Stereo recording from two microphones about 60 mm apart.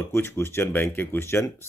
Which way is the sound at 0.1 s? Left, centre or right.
Left.